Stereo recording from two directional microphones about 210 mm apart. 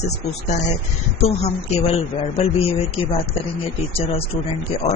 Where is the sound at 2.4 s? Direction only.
30° left (ahead or behind).